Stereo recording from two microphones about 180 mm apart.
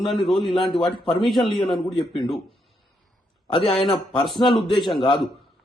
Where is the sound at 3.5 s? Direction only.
30° left (ahead or behind).